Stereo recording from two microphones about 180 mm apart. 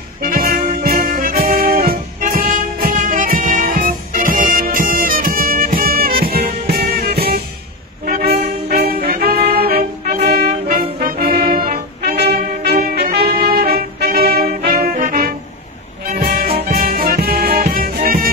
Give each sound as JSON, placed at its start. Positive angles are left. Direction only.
{"t": 0.2, "sound": "music", "side_deg": -50}
{"t": 8.1, "sound": "brass instrument", "side_deg": -60}
{"t": 10.2, "sound": "music", "side_deg": -55}
{"t": 10.8, "sound": "brass instrument", "side_deg": -55}
{"t": 14.7, "sound": "music", "side_deg": -55}